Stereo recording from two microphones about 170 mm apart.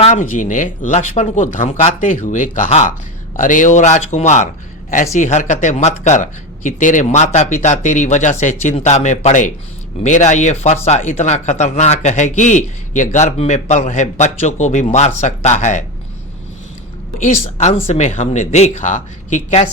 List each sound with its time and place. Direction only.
0.0 s speech: 45° left (ahead or behind)
17.2 s speech: 45° left (ahead or behind)